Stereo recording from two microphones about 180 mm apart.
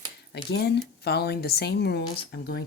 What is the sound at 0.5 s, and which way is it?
Speech, 70° left (ahead or behind).